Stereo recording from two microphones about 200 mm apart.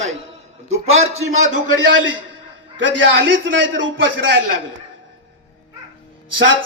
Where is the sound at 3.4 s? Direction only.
70° right (ahead or behind).